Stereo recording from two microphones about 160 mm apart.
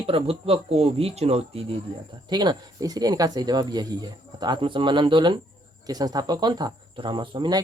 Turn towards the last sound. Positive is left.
turn(degrees=-30)  # may be behind; listen again after turning